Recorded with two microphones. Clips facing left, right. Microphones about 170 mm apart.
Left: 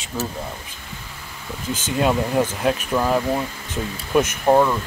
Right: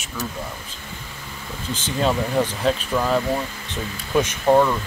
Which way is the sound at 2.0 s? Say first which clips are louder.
Left 1 dB; 10° left (ahead or behind).